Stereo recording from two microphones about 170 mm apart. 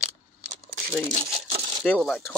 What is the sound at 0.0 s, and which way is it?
Crumpling, 45° right (ahead or behind).